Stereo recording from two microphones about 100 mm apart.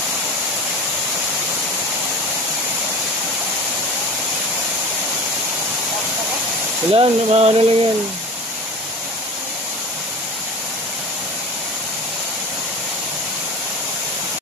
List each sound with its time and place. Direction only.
6.9 s speech: 70° right (ahead or behind)